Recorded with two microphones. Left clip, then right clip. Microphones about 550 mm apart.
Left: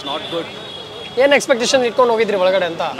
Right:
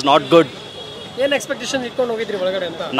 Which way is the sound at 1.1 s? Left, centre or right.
Left.